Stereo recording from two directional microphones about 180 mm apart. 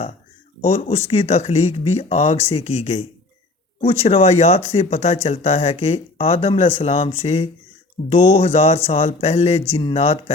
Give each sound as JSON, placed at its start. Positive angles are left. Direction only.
{"t": 0.6, "sound": "speech", "side_deg": 35}